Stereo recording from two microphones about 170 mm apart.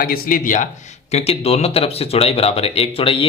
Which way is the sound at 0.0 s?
60° left (ahead or behind).